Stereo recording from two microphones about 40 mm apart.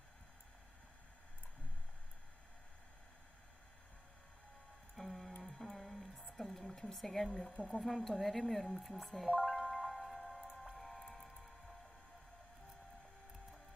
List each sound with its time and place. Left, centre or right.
4.9 s music: centre
5.5 s a sound: centre
7.3 s speech: centre
7.8 s a woman's voice: centre
9.5 s music: centre
9.8 s wind chime: centre
10.8 s music: centre